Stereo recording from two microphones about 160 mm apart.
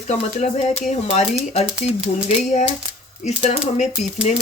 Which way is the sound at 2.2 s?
45° left (ahead or behind).